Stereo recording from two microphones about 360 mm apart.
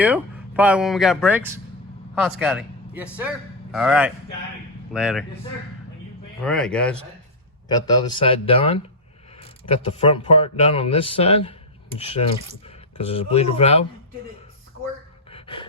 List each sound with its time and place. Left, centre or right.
0.0 s a man's voice: centre
6.4 s speech: centre
9.9 s speech: centre
15.3 s gasp: centre